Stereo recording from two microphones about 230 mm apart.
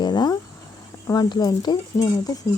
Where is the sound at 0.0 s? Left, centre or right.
Centre.